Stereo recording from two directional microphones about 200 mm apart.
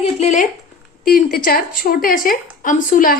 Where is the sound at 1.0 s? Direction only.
45° left (ahead or behind).